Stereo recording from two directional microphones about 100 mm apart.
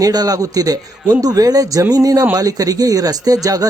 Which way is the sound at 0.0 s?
40° right (ahead or behind).